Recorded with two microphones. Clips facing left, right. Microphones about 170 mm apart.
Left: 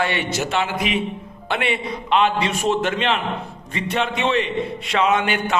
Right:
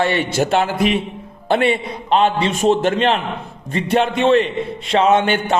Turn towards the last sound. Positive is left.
turn(degrees=-30)  # may be behind; listen again after turning